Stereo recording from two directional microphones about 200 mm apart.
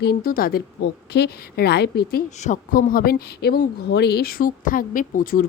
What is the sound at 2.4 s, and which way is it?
Speech, 40° left (ahead or behind).